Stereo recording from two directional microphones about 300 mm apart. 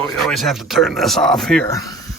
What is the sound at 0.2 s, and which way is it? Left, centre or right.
Speech, centre.